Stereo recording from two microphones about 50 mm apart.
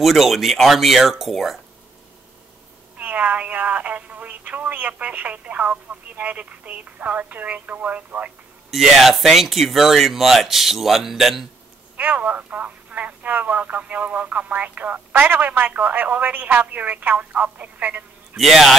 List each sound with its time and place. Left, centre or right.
0.0 s speech: centre
3.0 s speech: right
8.6 s speech: centre
12.0 s speech: right
18.3 s speech: centre